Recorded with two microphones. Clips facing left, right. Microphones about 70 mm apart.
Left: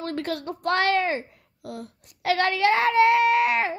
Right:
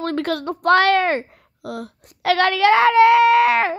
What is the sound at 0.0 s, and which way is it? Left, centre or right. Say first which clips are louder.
A woman's voice: right 6 dB; right.